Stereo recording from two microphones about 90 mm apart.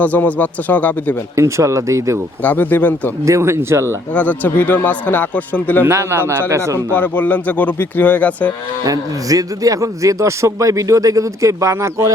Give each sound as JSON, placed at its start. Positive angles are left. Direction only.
{"t": 0.0, "sound": "speech", "side_deg": 15}
{"t": 1.4, "sound": "a man's voice", "side_deg": -35}
{"t": 2.4, "sound": "speech", "side_deg": 20}
{"t": 3.2, "sound": "a man's voice", "side_deg": -35}
{"t": 4.1, "sound": "speech", "side_deg": 15}
{"t": 5.8, "sound": "a man's voice", "side_deg": -30}
{"t": 6.9, "sound": "speech", "side_deg": 20}
{"t": 8.8, "sound": "a man's voice", "side_deg": -40}